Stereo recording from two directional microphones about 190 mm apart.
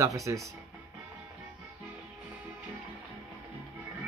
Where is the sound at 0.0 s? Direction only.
15° right (ahead or behind).